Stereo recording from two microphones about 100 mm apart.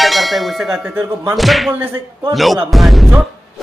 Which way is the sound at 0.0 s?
Centre (ahead or behind).